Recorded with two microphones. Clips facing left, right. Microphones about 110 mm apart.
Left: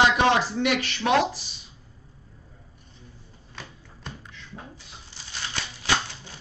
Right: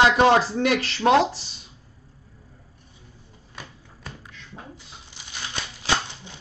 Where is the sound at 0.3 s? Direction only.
35° right (ahead or behind).